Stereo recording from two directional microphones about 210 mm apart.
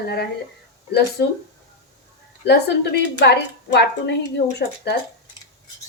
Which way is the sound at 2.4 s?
55° left (ahead or behind).